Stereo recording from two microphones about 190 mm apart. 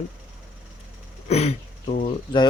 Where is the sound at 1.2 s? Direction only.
35° left (ahead or behind).